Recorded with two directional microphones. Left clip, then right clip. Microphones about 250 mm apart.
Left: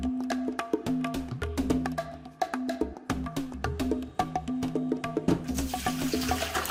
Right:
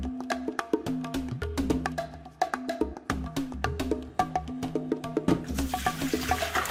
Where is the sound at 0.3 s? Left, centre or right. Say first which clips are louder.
Right 4 dB; centre.